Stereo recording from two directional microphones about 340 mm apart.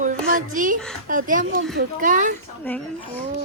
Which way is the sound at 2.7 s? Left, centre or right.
Centre.